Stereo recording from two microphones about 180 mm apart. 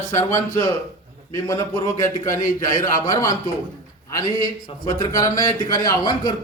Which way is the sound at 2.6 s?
20° left (ahead or behind).